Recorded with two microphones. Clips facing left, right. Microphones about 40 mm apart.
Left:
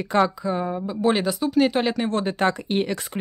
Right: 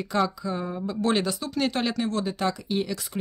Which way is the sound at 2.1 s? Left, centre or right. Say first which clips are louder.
Left 5 dB; left.